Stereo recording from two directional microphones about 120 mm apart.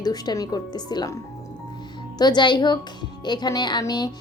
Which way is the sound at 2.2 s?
35° left (ahead or behind).